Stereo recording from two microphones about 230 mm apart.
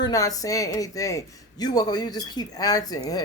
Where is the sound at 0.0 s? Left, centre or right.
Centre.